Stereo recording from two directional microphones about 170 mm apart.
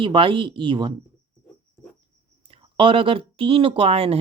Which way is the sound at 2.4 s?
30° right (ahead or behind).